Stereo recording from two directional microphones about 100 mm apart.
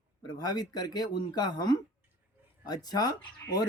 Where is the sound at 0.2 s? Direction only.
40° left (ahead or behind).